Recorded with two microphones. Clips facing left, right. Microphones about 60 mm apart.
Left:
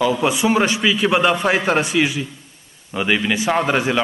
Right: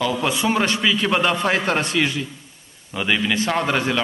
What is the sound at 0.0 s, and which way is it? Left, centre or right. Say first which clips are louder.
A man's voice: left 4 dB; centre.